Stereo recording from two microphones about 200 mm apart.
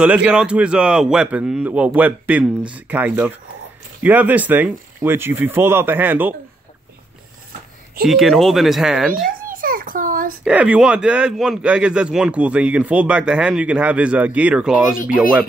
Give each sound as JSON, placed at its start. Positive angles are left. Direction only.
{"t": 0.0, "sound": "speech", "side_deg": -5}
{"t": 8.1, "sound": "speech", "side_deg": 0}
{"t": 9.3, "sound": "a sound", "side_deg": -45}
{"t": 10.4, "sound": "speech", "side_deg": -5}